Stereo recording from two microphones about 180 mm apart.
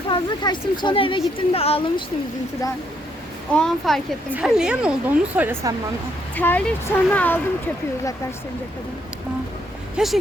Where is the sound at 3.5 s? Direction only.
5° left (ahead or behind).